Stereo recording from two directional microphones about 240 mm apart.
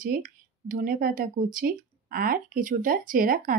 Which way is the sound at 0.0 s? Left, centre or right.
Right.